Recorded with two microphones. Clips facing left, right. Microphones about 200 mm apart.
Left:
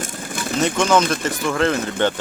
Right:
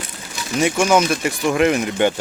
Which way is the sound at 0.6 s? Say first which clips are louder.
Right 1 dB; 10° right (ahead or behind).